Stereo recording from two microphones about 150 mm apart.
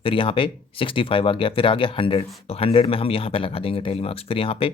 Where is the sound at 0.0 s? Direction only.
35° left (ahead or behind).